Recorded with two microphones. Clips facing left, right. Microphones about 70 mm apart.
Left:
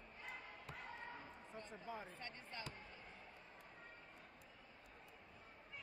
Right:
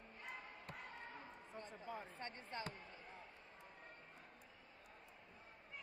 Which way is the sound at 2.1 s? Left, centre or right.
Right.